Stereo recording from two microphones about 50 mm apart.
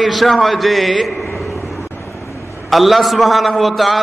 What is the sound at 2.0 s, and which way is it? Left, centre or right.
Vehicle, left.